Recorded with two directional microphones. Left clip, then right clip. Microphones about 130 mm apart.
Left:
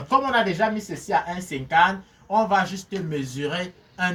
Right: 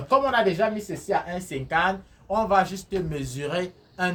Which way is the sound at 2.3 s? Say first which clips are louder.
Left 1 dB; 45° right (ahead or behind).